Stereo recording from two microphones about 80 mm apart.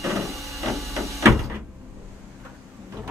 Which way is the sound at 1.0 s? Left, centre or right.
Right.